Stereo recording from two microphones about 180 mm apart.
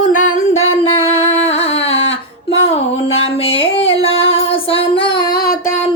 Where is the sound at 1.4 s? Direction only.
35° left (ahead or behind).